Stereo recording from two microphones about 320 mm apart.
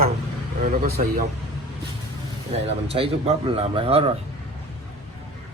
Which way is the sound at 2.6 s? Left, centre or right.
Centre.